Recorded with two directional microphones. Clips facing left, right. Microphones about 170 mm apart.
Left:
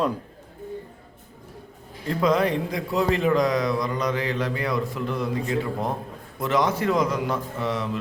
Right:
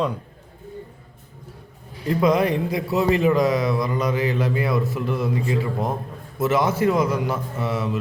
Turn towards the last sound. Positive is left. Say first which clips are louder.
# right 2 dB
turn(degrees=-5)  # may be behind; listen again after turning